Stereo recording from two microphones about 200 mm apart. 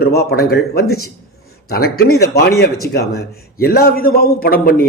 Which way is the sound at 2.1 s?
55° left (ahead or behind).